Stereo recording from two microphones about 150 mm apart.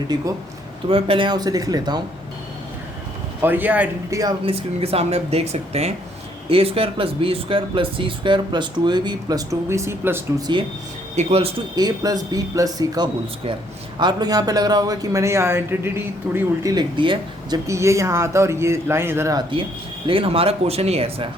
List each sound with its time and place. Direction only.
0.9 s speech: 35° right (ahead or behind)
3.4 s speech: 10° right (ahead or behind)
4.4 s speech: 40° right (ahead or behind); by 10.2 s 15° right (ahead or behind)
11.1 s speech: 45° right (ahead or behind)
11.7 s speech: 25° right (ahead or behind)
16.7 s speech: 30° right (ahead or behind)
17.7 s speech: 20° right (ahead or behind); by 21.2 s 40° right (ahead or behind)